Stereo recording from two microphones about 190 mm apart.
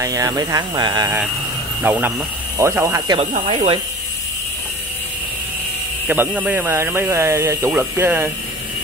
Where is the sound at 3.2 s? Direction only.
35° right (ahead or behind).